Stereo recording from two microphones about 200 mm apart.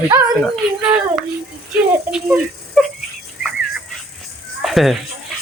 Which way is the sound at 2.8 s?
Centre (ahead or behind).